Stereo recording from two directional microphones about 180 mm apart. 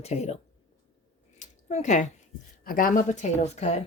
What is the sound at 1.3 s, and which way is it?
Squish, 40° left (ahead or behind).